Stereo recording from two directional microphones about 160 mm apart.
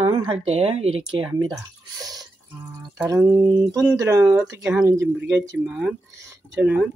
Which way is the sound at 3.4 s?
20° right (ahead or behind).